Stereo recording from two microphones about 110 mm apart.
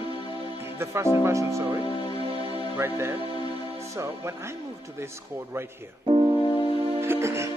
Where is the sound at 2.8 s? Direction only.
20° right (ahead or behind).